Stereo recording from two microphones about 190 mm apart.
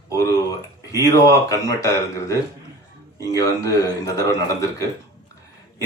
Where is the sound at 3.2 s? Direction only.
15° left (ahead or behind).